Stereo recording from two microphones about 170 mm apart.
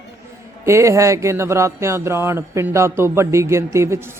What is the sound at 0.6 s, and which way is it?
A man's voice, 15° right (ahead or behind).